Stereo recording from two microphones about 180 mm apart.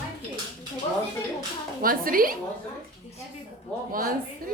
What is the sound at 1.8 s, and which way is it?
Speech, 50° right (ahead or behind).